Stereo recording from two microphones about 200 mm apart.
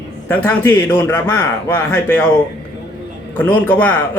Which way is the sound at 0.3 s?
10° left (ahead or behind).